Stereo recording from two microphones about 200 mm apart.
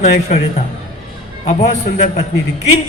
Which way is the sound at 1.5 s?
30° left (ahead or behind).